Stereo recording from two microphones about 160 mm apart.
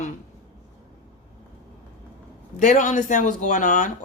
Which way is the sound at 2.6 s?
50° left (ahead or behind).